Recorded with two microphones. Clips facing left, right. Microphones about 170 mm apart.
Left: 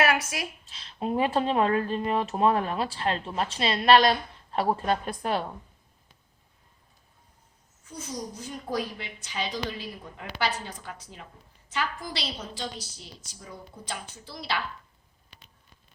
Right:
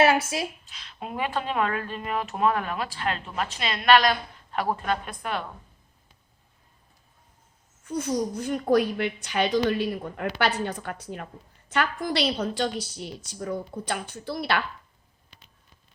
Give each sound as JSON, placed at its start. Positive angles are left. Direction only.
{"t": 0.0, "sound": "speech", "side_deg": -25}
{"t": 0.7, "sound": "speech", "side_deg": 30}
{"t": 7.9, "sound": "a woman's voice", "side_deg": -65}